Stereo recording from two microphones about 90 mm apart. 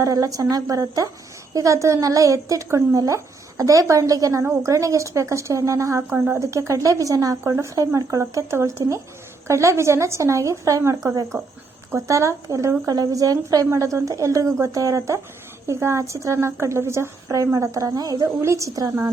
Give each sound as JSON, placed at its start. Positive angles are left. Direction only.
{"t": 0.0, "sound": "speech", "side_deg": -40}
{"t": 6.0, "sound": "speech", "side_deg": -20}
{"t": 6.4, "sound": "speech", "side_deg": -35}